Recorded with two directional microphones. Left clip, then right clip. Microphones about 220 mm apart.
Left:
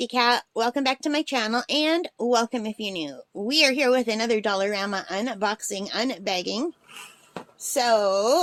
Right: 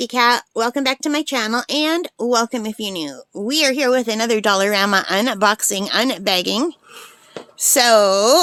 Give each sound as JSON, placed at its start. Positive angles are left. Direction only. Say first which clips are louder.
{"t": 0.0, "sound": "speech", "louder": "right 6 dB", "side_deg": -20}
{"t": 7.7, "sound": "speech", "louder": "right 8 dB", "side_deg": -45}